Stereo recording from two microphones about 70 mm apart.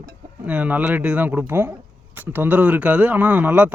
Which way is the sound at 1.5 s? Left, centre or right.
Right.